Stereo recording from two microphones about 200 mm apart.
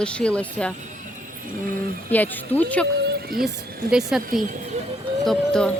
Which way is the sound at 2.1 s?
10° left (ahead or behind).